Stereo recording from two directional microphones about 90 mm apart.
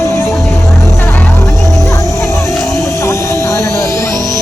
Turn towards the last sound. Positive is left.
turn(degrees=35)  # may be behind; listen again after turning